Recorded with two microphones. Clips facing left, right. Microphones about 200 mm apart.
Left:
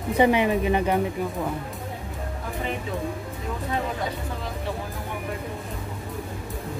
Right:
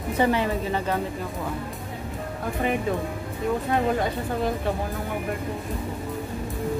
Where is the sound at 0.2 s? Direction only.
15° left (ahead or behind).